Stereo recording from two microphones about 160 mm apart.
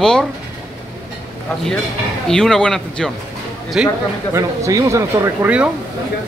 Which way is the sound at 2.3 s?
5° left (ahead or behind).